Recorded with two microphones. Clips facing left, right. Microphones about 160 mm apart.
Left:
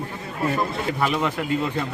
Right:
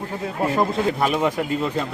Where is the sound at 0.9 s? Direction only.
15° right (ahead or behind).